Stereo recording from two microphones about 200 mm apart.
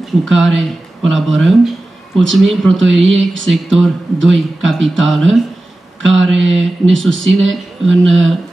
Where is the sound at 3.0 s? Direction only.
70° right (ahead or behind).